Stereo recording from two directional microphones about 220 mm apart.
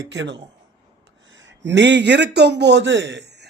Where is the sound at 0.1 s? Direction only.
55° right (ahead or behind).